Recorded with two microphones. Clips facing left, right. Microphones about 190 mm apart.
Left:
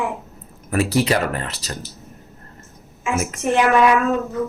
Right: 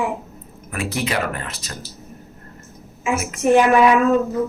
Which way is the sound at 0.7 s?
35° left (ahead or behind).